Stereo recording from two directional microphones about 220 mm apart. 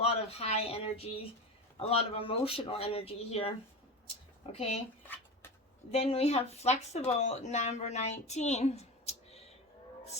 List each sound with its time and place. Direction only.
0.0 s speech: 25° left (ahead or behind)
5.0 s a sound: 10° left (ahead or behind)
5.9 s speech: 25° left (ahead or behind)